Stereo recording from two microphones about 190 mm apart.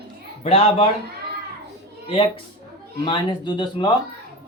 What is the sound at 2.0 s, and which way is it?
Speech, 30° left (ahead or behind).